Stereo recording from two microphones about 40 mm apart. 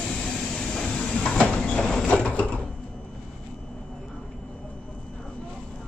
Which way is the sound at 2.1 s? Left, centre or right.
Left.